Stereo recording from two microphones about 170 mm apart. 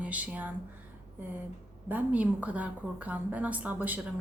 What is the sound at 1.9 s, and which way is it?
A woman's voice, 10° right (ahead or behind).